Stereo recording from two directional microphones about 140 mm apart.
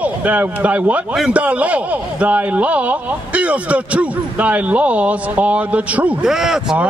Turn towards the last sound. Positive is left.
turn(degrees=-5)  # may be behind; listen again after turning